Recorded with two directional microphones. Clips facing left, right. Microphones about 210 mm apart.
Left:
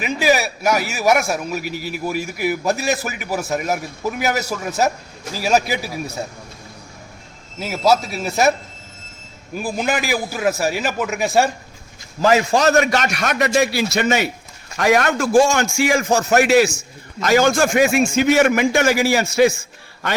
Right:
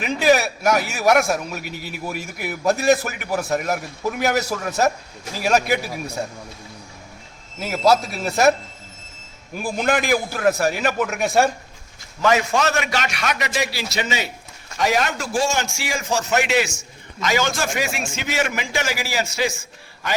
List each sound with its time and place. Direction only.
0.0 s a man's voice: 5° left (ahead or behind)
7.6 s a man's voice: centre (ahead or behind)
9.7 s a man's voice: centre (ahead or behind)
12.2 s a man's voice: 35° left (ahead or behind); by 19.5 s 55° left (ahead or behind)